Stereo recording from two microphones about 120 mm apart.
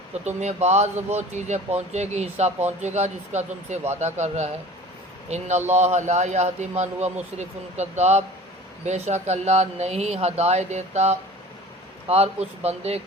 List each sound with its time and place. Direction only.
0.1 s a man's voice: 70° right (ahead or behind)